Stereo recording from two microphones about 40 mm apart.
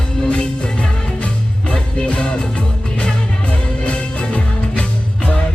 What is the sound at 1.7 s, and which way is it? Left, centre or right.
Music, left.